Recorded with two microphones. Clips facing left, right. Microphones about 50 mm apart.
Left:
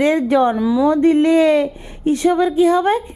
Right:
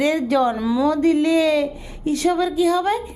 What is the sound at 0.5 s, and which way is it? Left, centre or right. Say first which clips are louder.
Speech: left 4 dB; centre.